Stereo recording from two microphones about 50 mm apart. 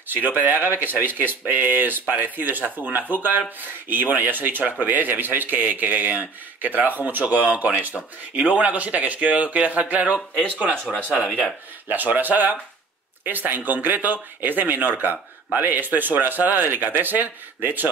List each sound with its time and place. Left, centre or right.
0.1 s speech: right
11.9 s speech: right